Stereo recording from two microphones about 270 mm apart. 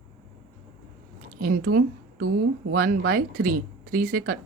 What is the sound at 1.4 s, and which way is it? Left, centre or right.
Speech, right.